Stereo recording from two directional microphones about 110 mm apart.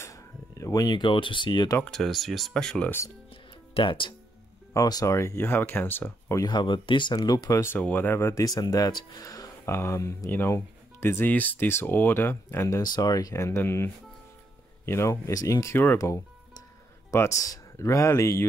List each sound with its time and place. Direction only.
0.0 s a sound: 30° left (ahead or behind)
1.9 s speech: centre (ahead or behind)
3.7 s speech: 50° left (ahead or behind)
4.7 s speech: 35° left (ahead or behind)
6.4 s speech: 45° left (ahead or behind)
7.2 s speech: 35° left (ahead or behind)
7.7 s speech: 15° left (ahead or behind)
8.5 s speech: 35° left (ahead or behind)
17.1 s speech: 25° left (ahead or behind)